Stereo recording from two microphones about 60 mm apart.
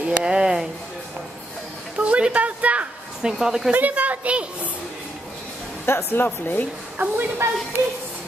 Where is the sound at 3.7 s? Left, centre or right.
Right.